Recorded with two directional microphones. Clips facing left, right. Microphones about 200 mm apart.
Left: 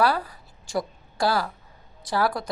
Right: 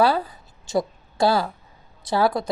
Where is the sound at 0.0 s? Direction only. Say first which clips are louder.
Right 3 dB; 25° right (ahead or behind).